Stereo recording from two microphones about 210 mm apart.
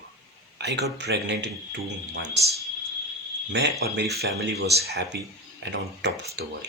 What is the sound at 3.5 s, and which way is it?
Speech, 55° right (ahead or behind).